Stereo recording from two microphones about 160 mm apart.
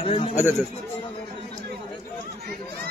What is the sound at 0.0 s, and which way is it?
Speech, 40° left (ahead or behind).